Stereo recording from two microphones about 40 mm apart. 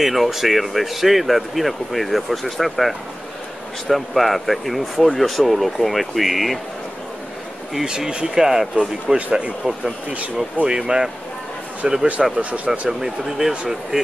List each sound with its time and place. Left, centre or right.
0.0 s speech: centre
7.8 s speech: centre
10.7 s speech: centre
12.4 s speech: right
13.0 s speech: centre